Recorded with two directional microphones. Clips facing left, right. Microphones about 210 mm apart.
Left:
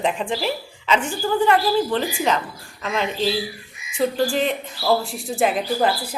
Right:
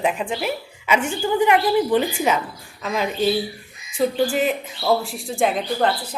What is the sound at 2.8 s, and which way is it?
A woman's voice, 10° right (ahead or behind).